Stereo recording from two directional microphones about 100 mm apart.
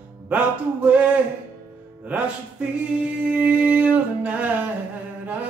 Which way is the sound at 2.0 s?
15° right (ahead or behind).